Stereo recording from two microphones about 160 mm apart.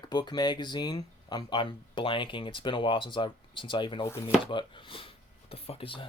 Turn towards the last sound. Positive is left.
turn(degrees=35)  # may be behind; listen again after turning